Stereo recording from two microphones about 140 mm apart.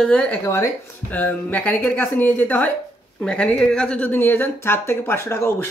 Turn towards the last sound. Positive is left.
turn(degrees=20)  # may be behind; listen again after turning